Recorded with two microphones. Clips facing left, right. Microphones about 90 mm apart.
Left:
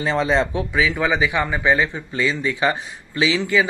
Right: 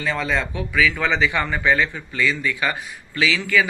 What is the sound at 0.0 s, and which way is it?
Speech, 30° left (ahead or behind).